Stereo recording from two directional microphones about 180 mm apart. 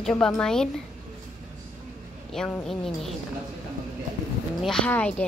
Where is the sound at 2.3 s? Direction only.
5° left (ahead or behind).